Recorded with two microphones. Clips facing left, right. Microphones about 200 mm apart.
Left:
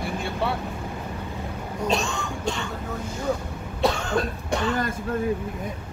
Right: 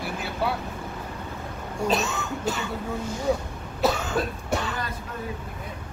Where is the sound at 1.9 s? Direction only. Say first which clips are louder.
Even; 5° right (ahead or behind).